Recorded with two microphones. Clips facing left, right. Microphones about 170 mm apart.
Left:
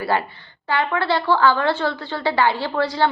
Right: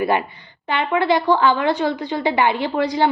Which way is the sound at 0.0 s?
20° right (ahead or behind).